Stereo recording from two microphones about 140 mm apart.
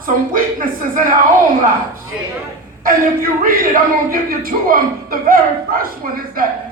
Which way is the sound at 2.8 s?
90° right.